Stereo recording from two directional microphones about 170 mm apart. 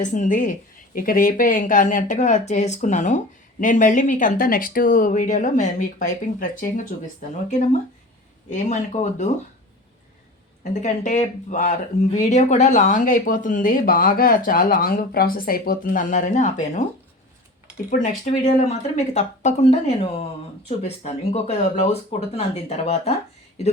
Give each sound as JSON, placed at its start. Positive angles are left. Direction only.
{"t": 0.0, "sound": "speech", "side_deg": 45}
{"t": 10.6, "sound": "speech", "side_deg": 45}
{"t": 17.9, "sound": "speech", "side_deg": 50}